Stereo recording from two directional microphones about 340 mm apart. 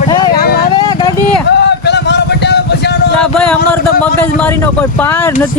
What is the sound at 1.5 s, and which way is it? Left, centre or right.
Music, left.